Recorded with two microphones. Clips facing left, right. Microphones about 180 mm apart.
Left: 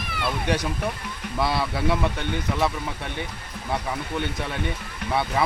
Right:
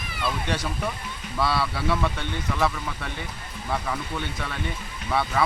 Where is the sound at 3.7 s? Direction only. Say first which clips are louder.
Left 1 dB; 20° left (ahead or behind).